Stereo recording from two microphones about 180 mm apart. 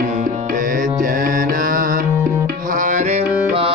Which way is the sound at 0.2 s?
45° right (ahead or behind).